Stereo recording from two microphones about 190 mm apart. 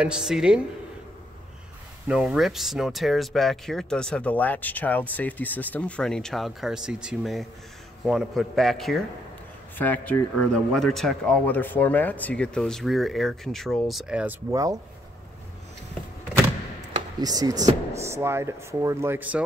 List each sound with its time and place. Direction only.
0.0 s speech: 5° right (ahead or behind)
2.0 s speech: 5° right (ahead or behind)
17.2 s speech: 20° right (ahead or behind)